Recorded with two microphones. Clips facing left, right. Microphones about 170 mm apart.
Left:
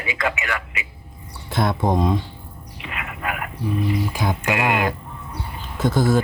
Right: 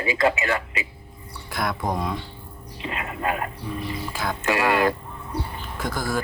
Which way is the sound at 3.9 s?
20° left (ahead or behind).